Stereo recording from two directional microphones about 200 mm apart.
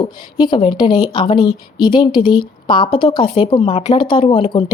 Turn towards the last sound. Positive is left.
turn(degrees=25)  # may be behind; listen again after turning